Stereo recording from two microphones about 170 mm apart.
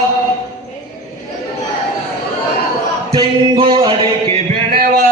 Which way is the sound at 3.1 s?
30° right (ahead or behind).